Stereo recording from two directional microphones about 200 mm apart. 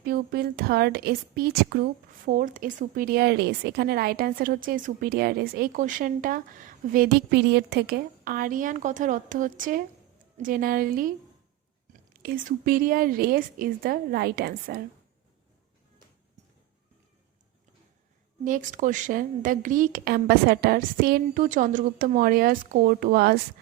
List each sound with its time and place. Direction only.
0.0 s a woman's voice: 50° right (ahead or behind)
12.1 s a woman's voice: 45° right (ahead or behind)
18.4 s a woman's voice: 40° right (ahead or behind)